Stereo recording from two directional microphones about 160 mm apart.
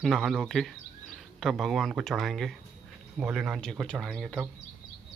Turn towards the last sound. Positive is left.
turn(degrees=0)  # may be behind; listen again after turning